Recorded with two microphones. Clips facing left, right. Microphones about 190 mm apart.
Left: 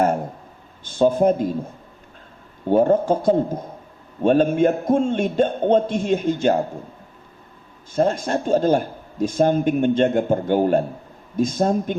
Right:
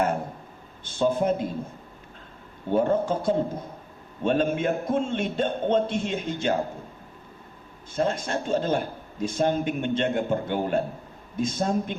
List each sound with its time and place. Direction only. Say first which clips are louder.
0.9 s a man's voice: left 6 dB; 40° left (ahead or behind)
2.6 s a man's voice: left 6 dB; 40° left (ahead or behind)
7.9 s a man's voice: left 6 dB; 40° left (ahead or behind)